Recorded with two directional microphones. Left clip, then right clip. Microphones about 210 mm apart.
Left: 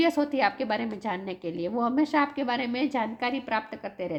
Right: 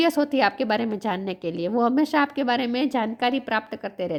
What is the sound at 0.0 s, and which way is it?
A woman's voice, 45° right (ahead or behind).